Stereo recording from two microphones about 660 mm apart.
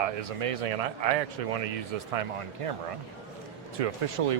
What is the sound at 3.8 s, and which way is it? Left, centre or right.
Speech, right.